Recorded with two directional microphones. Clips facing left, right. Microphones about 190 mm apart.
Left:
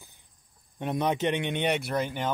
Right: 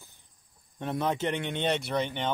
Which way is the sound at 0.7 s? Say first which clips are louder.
Left 2 dB; 15° left (ahead or behind).